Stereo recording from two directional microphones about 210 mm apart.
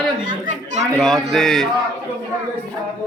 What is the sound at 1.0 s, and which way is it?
Speech, centre (ahead or behind).